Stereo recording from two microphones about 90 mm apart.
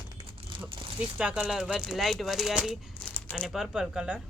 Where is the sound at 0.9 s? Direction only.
10° right (ahead or behind).